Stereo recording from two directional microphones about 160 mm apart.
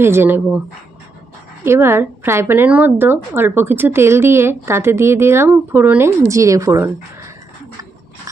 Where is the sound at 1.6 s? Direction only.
15° right (ahead or behind).